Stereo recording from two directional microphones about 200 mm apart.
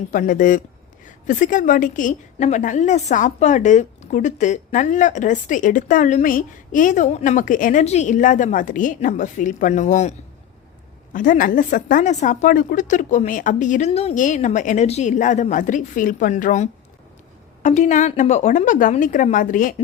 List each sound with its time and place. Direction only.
0.1 s a woman's voice: 40° left (ahead or behind)